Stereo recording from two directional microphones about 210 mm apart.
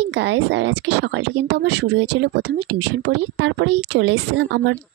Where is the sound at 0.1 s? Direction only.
60° right (ahead or behind).